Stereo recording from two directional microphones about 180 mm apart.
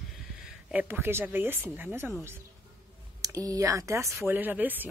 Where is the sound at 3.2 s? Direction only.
20° right (ahead or behind).